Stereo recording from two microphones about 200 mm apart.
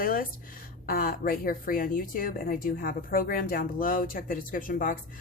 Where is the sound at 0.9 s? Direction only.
45° left (ahead or behind).